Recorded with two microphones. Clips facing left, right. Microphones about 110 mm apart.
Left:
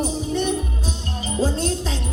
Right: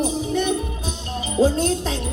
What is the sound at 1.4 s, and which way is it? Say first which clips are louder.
Speech: right 4 dB; 50° right (ahead or behind).